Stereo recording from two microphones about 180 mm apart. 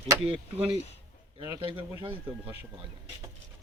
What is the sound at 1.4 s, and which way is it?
Speech, 20° right (ahead or behind).